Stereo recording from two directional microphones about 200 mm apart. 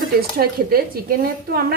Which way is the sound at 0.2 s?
50° right (ahead or behind).